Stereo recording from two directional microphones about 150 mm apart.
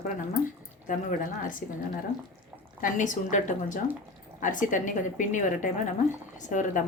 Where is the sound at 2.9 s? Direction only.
55° left (ahead or behind).